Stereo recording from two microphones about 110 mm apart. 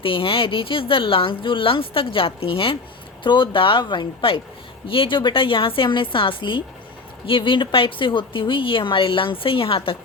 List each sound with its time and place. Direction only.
0.0 s a woman's voice: 55° left (ahead or behind)